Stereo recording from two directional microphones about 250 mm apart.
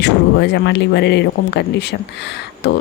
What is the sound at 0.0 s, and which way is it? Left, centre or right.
Speech, left.